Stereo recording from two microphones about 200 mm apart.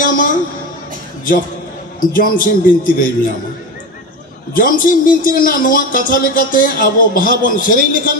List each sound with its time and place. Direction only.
0.0 s music: 45° left (ahead or behind)
2.0 s a man's voice: 45° left (ahead or behind)
4.6 s a man's voice: 45° left (ahead or behind)